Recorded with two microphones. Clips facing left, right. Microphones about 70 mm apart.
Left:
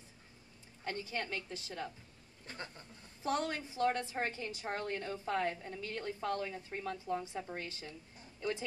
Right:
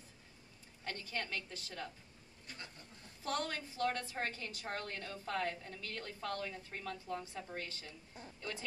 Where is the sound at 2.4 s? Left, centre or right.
Left.